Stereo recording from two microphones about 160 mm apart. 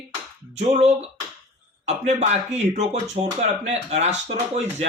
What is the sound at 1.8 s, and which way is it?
Speech, 45° right (ahead or behind).